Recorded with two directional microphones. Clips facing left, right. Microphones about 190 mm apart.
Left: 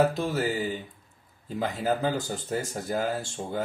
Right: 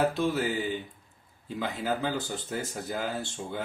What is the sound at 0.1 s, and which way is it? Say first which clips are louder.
Speech: even; 40° left (ahead or behind).